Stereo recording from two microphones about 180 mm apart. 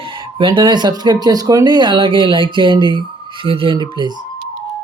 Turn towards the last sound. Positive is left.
turn(degrees=-25)  # may be behind; listen again after turning